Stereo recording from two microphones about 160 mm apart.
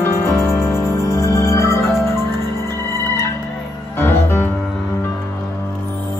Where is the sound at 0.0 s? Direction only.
15° left (ahead or behind).